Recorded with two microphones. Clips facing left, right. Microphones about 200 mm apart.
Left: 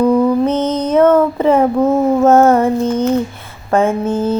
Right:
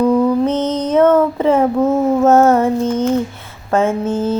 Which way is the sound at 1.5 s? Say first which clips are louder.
Left 2 dB; 15° left (ahead or behind).